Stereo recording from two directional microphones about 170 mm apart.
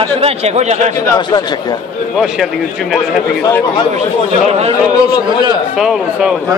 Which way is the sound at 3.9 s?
40° right (ahead or behind).